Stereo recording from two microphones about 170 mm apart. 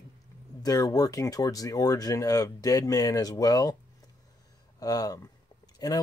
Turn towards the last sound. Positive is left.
turn(degrees=20)  # may be behind; listen again after turning